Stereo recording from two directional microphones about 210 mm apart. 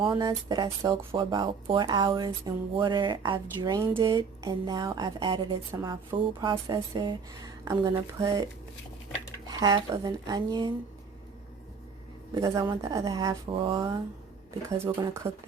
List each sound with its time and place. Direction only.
0.0 s speech: 20° right (ahead or behind)
9.5 s speech: 20° right (ahead or behind)
12.3 s speech: 20° right (ahead or behind)